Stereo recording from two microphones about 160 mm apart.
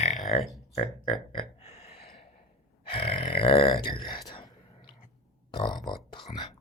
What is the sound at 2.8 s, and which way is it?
Speech, 35° left (ahead or behind).